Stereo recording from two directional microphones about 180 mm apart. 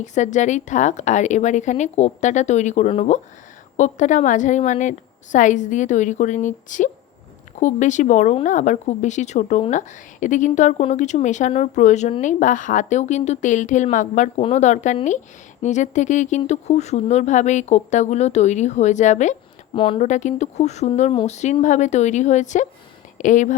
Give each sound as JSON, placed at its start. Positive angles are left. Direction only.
{"t": 0.0, "sound": "a woman's voice", "side_deg": 40}
{"t": 19.7, "sound": "speech", "side_deg": 30}
{"t": 20.0, "sound": "speech", "side_deg": 40}